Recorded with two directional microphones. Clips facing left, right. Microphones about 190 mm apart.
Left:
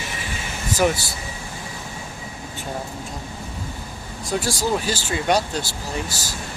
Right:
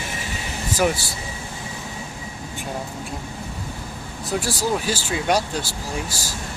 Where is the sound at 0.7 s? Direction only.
10° right (ahead or behind).